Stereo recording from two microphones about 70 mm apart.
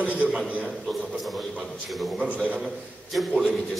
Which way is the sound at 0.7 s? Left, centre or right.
Centre.